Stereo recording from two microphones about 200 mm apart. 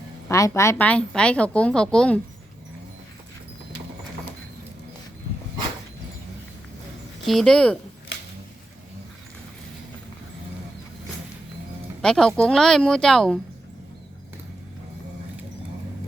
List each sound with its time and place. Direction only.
0.3 s a woman's voice: 15° left (ahead or behind)
7.3 s a woman's voice: centre (ahead or behind)
12.0 s a woman's voice: 5° left (ahead or behind)